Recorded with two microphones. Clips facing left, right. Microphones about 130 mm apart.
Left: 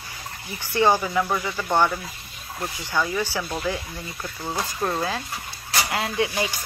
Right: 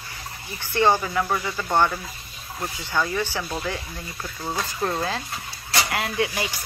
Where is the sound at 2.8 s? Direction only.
15° left (ahead or behind).